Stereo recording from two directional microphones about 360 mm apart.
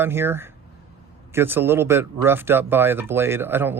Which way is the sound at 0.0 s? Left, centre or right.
Centre.